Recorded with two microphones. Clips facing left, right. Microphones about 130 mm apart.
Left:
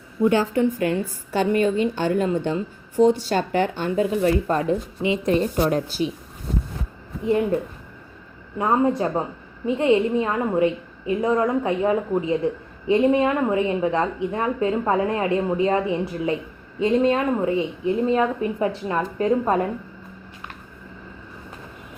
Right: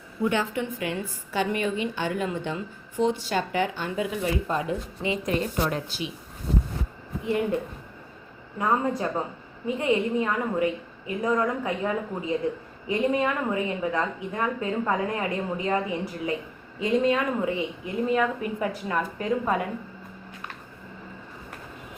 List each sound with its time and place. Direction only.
0.3 s a woman's voice: 35° left (ahead or behind)
5.0 s a woman's voice: 25° left (ahead or behind)
5.6 s a woman's voice: 40° left (ahead or behind)
8.5 s a woman's voice: 25° left (ahead or behind)